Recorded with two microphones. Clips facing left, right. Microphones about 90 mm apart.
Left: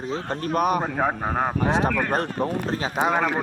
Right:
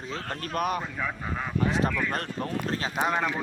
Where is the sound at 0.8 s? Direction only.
50° left (ahead or behind).